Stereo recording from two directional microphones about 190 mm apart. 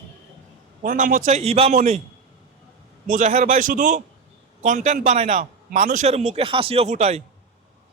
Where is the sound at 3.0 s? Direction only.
45° right (ahead or behind).